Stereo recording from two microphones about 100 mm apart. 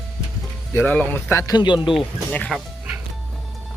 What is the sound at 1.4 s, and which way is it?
Speech, 45° left (ahead or behind).